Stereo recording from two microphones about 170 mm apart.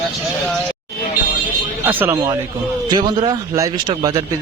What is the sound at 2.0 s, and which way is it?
Speech, 15° right (ahead or behind).